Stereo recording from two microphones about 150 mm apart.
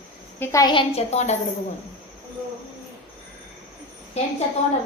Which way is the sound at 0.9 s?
50° left (ahead or behind).